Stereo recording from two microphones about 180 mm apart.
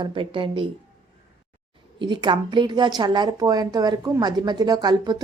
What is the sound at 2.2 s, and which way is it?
A woman's voice, 25° right (ahead or behind).